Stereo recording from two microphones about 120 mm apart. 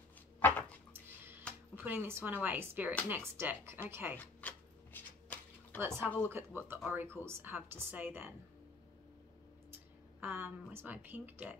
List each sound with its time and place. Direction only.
0.4 s dog: 15° left (ahead or behind)
1.8 s a woman's voice: 15° right (ahead or behind)
4.2 s a sound: 15° left (ahead or behind)
5.9 s speech: 10° left (ahead or behind)
6.2 s a woman's voice: 20° right (ahead or behind)
10.2 s a woman's voice: 15° right (ahead or behind)